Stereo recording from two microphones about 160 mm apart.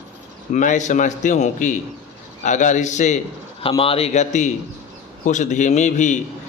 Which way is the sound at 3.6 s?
35° left (ahead or behind).